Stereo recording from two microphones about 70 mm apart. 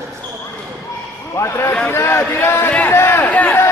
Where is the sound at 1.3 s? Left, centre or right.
Left.